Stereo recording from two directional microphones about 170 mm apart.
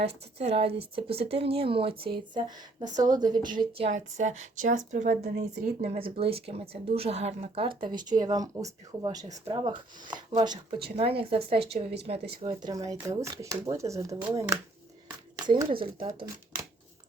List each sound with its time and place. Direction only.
0.0 s a woman's voice: 35° right (ahead or behind)
12.7 s speech: 20° right (ahead or behind)
15.4 s a woman's voice: 30° right (ahead or behind)